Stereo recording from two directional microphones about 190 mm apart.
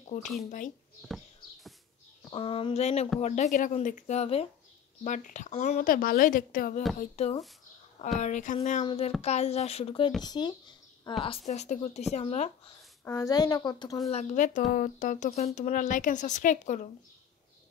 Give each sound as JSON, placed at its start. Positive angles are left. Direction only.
{"t": 0.1, "sound": "a woman's voice", "side_deg": 45}
{"t": 1.0, "sound": "horse", "side_deg": 0}
{"t": 2.3, "sound": "a woman's voice", "side_deg": 30}
{"t": 7.0, "sound": "a woman's voice", "side_deg": 35}
{"t": 11.2, "sound": "speech", "side_deg": 35}
{"t": 13.0, "sound": "a woman's voice", "side_deg": 15}
{"t": 14.0, "sound": "speech", "side_deg": 35}